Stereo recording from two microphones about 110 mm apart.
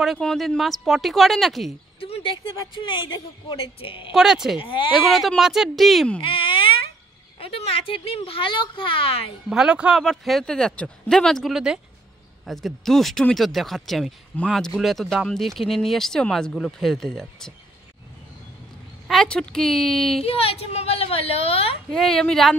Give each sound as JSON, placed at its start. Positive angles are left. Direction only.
{"t": 0.0, "sound": "speech", "side_deg": 0}
{"t": 2.0, "sound": "a sound", "side_deg": 60}
{"t": 2.6, "sound": "speech", "side_deg": 45}
{"t": 4.1, "sound": "speech", "side_deg": -5}
{"t": 4.6, "sound": "speech", "side_deg": 50}
{"t": 5.1, "sound": "speech", "side_deg": 0}
{"t": 6.2, "sound": "mosquito", "side_deg": 50}
{"t": 7.3, "sound": "speech", "side_deg": 60}
{"t": 9.5, "sound": "speech", "side_deg": -5}
{"t": 19.0, "sound": "speech", "side_deg": 5}
{"t": 20.2, "sound": "speech", "side_deg": 60}
{"t": 21.9, "sound": "speech", "side_deg": 5}